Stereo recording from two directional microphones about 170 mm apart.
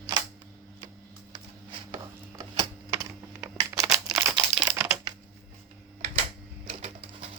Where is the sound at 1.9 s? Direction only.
20° right (ahead or behind).